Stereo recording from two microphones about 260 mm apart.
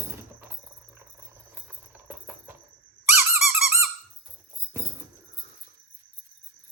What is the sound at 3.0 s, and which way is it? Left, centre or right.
Squeak, centre.